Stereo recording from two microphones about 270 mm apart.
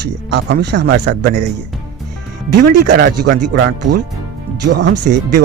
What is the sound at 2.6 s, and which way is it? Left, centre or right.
Speech, right.